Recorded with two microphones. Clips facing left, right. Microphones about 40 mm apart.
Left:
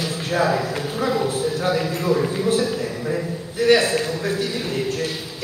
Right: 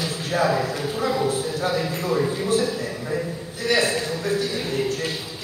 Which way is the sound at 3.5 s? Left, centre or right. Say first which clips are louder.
Left 5 dB; left.